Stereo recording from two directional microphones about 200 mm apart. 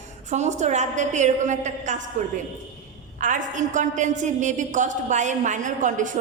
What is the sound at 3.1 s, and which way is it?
A woman's voice, 40° right (ahead or behind).